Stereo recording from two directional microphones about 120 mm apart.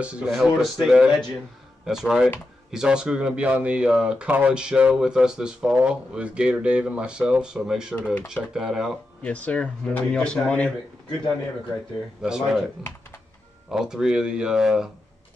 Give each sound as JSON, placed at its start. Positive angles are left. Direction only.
{"t": 0.0, "sound": "speech", "side_deg": -5}
{"t": 7.9, "sound": "speech", "side_deg": 15}
{"t": 8.5, "sound": "speech", "side_deg": -5}
{"t": 9.2, "sound": "speech", "side_deg": 10}
{"t": 12.2, "sound": "speech", "side_deg": -5}
{"t": 13.7, "sound": "speech", "side_deg": -5}